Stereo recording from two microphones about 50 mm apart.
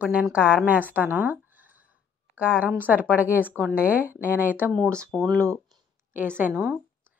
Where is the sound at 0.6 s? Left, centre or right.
Right.